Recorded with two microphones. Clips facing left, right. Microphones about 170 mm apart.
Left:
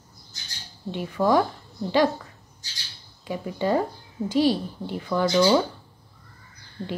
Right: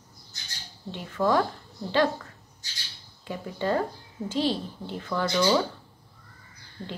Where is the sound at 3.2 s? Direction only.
15° left (ahead or behind).